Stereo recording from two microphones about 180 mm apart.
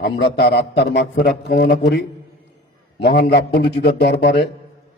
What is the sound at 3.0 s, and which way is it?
A man's voice, 65° left (ahead or behind).